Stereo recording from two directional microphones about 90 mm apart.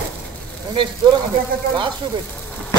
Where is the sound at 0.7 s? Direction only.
65° right (ahead or behind).